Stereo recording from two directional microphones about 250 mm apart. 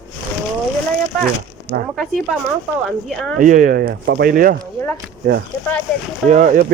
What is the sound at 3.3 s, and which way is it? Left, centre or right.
Speech, right.